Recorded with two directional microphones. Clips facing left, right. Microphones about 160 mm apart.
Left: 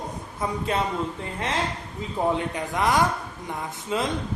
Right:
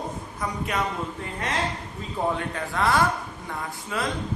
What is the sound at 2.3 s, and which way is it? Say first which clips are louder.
Speech: left 1 dB; 20° left (ahead or behind).